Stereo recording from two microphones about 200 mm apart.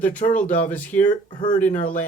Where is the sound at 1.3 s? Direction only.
25° left (ahead or behind).